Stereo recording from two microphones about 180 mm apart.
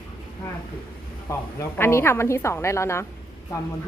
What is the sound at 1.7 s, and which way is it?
A woman's voice, 15° left (ahead or behind).